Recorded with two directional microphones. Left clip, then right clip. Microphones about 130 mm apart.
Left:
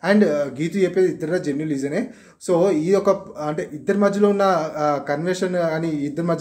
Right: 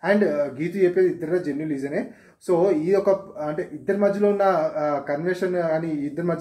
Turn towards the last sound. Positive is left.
turn(degrees=15)  # may be behind; listen again after turning